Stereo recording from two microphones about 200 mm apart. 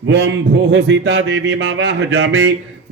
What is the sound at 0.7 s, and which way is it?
A man's voice, 65° right (ahead or behind).